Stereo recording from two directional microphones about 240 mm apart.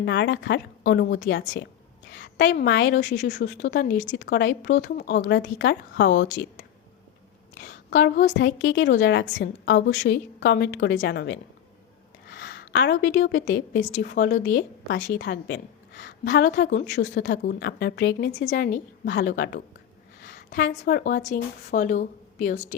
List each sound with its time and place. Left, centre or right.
0.0 s a woman's voice: left
4.1 s a woman's voice: left
7.5 s a woman's voice: left
8.3 s a woman's voice: left